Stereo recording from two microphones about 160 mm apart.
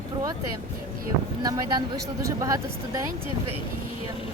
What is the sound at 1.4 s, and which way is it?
Speech, 25° right (ahead or behind).